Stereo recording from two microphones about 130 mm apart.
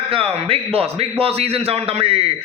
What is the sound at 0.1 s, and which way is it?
A man's voice, 45° right (ahead or behind).